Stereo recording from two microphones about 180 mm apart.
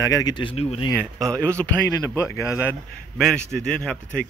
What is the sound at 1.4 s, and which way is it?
Speech, 10° left (ahead or behind).